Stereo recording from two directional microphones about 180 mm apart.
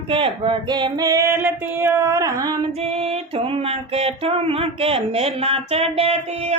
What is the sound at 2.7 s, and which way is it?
Music, 35° right (ahead or behind).